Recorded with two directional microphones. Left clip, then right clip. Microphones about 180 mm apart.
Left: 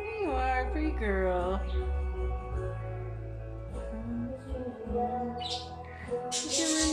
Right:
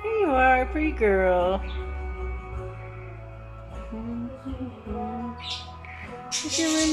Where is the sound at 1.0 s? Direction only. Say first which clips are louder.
Right 10 dB; 20° right (ahead or behind).